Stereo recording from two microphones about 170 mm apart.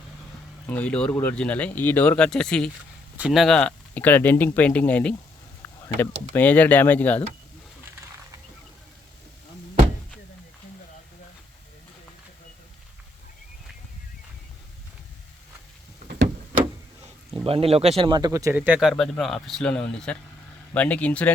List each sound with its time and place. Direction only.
0.7 s speech: 10° left (ahead or behind)
16.0 s a sound: 65° right (ahead or behind)
17.4 s speech: 35° right (ahead or behind); by 21.3 s 10° left (ahead or behind)